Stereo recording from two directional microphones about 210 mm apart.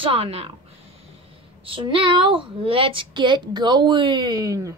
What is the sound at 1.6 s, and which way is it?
A woman's voice, 25° right (ahead or behind).